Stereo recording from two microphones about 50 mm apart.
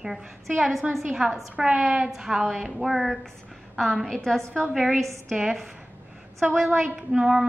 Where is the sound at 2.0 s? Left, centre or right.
Centre.